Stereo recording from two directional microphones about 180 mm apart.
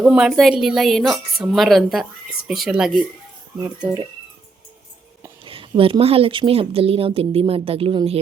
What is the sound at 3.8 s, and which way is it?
Speech, 20° right (ahead or behind).